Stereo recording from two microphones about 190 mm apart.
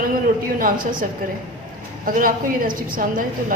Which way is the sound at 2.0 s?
45° right (ahead or behind).